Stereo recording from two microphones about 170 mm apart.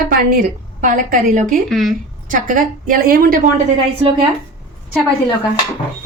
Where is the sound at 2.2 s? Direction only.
50° right (ahead or behind).